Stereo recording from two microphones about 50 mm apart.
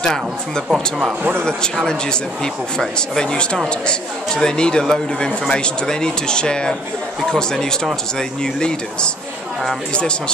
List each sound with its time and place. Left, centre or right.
0.7 s speech: centre
2.8 s speech: centre